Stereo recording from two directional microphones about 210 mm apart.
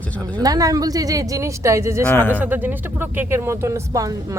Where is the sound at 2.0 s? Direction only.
10° left (ahead or behind).